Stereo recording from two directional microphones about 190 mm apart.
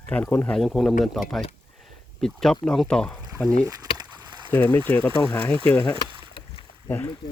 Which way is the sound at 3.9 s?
25° right (ahead or behind).